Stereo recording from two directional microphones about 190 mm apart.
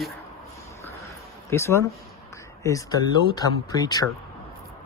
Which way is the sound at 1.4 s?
15° left (ahead or behind).